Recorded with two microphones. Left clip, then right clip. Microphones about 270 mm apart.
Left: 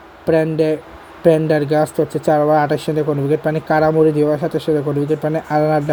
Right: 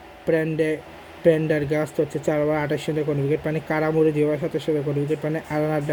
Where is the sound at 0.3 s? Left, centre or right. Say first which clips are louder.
Left 6 dB; centre.